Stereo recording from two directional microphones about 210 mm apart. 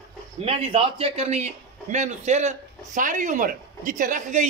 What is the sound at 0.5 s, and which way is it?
A man's voice, 25° right (ahead or behind).